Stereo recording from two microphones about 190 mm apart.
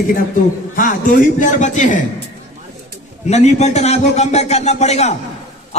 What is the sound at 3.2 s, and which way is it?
A man's voice, 35° left (ahead or behind).